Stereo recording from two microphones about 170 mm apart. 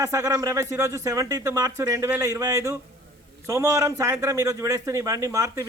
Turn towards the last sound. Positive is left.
turn(degrees=-20)  # may be behind; listen again after turning